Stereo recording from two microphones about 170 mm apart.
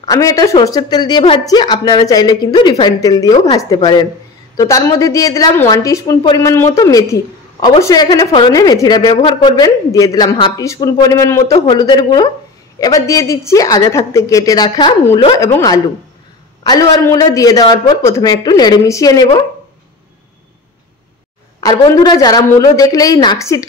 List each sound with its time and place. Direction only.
0.0 s a man's voice: 20° left (ahead or behind)
21.5 s a man's voice: 25° left (ahead or behind)